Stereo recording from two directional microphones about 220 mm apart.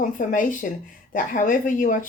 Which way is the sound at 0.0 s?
35° left (ahead or behind).